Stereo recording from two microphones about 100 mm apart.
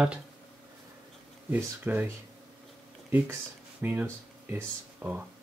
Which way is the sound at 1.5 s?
20° right (ahead or behind).